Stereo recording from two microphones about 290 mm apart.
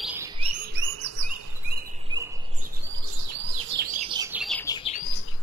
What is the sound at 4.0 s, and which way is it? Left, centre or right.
Bird, centre.